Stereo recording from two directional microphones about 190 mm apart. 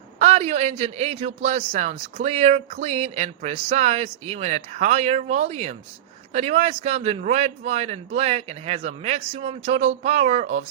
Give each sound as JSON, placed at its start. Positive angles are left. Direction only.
{"t": 0.2, "sound": "a man's voice", "side_deg": -35}